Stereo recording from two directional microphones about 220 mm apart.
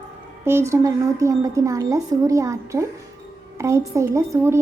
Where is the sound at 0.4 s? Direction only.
10° right (ahead or behind).